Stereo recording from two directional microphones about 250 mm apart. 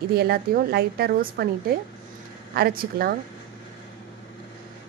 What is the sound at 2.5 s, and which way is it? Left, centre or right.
Speech, right.